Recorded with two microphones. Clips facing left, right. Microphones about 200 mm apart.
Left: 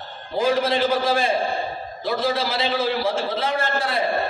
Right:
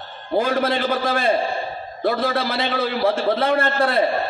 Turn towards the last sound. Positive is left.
turn(degrees=-60)  # may be behind; listen again after turning